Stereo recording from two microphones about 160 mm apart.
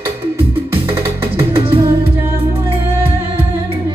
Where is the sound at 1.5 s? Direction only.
35° right (ahead or behind).